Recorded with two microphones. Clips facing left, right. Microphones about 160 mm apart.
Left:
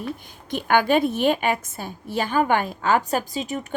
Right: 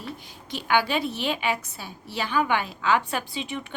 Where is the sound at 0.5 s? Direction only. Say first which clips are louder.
Left 5 dB; 50° left (ahead or behind).